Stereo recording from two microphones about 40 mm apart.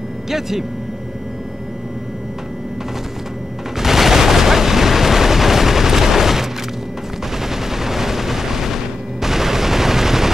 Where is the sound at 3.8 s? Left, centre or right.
Centre.